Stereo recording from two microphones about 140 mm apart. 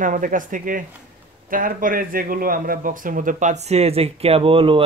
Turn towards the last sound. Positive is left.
turn(degrees=-40)  # may be behind; listen again after turning